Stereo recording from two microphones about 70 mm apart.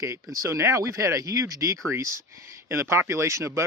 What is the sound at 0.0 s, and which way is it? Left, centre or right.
Speech, right.